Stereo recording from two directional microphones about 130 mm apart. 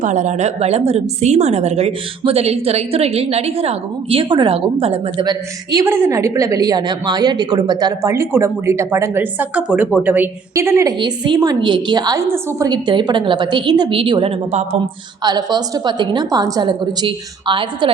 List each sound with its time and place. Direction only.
0.0 s a woman's voice: 70° right (ahead or behind); by 5.2 s 45° right (ahead or behind)
5.2 s a woman's voice: 35° right (ahead or behind)
5.8 s a woman's voice: 20° right (ahead or behind)
11.0 s a woman's voice: 35° right (ahead or behind)
12.3 s a woman's voice: 20° right (ahead or behind)
12.6 s a woman's voice: 35° right (ahead or behind)